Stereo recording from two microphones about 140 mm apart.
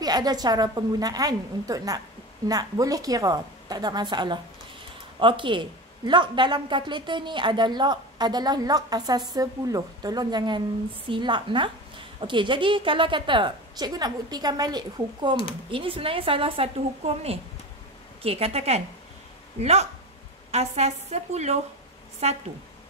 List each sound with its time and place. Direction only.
0.0 s a woman's voice: 30° right (ahead or behind); by 22.4 s 50° right (ahead or behind)